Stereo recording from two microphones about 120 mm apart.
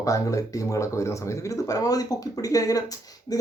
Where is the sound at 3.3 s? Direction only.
30° left (ahead or behind).